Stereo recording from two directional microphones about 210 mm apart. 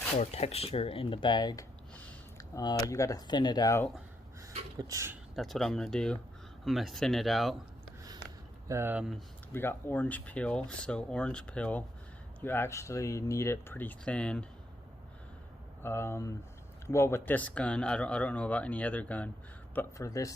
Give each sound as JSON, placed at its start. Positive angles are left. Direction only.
{"t": 0.2, "sound": "speech", "side_deg": 30}
{"t": 2.0, "sound": "a sound", "side_deg": 10}
{"t": 2.6, "sound": "speech", "side_deg": 20}
{"t": 4.8, "sound": "speech", "side_deg": -15}
{"t": 5.3, "sound": "speech", "side_deg": 0}
{"t": 8.6, "sound": "speech", "side_deg": -10}
{"t": 9.5, "sound": "speech", "side_deg": 10}
{"t": 15.8, "sound": "speech", "side_deg": 10}